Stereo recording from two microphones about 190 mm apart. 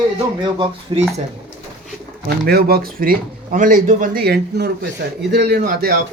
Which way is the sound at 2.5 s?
55° right (ahead or behind).